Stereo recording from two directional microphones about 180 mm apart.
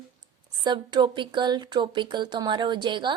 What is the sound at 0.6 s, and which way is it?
Speech, 25° right (ahead or behind).